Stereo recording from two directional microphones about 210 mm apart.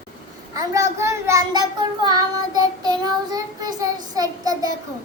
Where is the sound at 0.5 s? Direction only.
15° right (ahead or behind).